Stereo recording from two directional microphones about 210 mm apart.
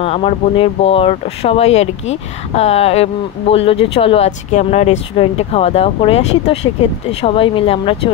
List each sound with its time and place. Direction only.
0.0 s speech: 30° left (ahead or behind)